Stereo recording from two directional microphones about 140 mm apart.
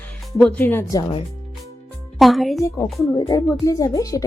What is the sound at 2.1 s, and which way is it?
Speech, centre (ahead or behind).